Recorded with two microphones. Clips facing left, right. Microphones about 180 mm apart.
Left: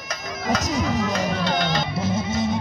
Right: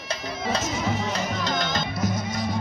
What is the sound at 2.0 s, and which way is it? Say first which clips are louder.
Music: left 5 dB; 25° left (ahead or behind).